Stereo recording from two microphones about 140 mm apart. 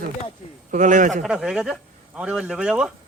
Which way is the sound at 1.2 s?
5° right (ahead or behind).